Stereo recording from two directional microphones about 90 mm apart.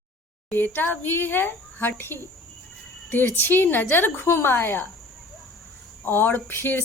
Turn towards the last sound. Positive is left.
turn(degrees=25)  # may be behind; listen again after turning